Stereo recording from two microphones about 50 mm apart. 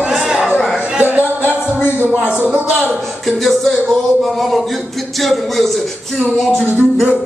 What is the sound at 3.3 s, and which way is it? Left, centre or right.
A man's voice, centre.